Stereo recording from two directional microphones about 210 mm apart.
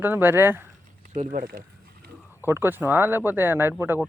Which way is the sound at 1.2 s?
40° right (ahead or behind).